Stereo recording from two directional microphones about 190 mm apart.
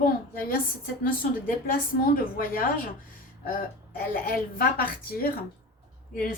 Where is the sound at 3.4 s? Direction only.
50° left (ahead or behind).